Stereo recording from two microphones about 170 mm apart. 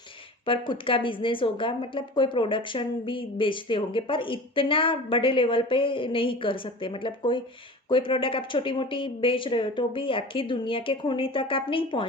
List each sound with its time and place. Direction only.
0.4 s a woman's voice: 30° left (ahead or behind)